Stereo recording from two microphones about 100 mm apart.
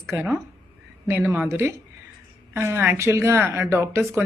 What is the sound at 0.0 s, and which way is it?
Speech, 30° right (ahead or behind).